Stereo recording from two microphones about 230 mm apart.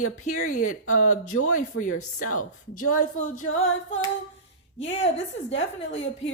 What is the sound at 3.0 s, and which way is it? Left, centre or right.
Speech, left.